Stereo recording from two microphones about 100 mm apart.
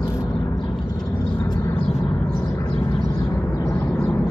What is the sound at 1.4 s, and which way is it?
Vehicle, 30° left (ahead or behind).